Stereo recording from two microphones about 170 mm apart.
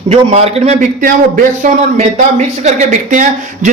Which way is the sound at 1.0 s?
50° right (ahead or behind).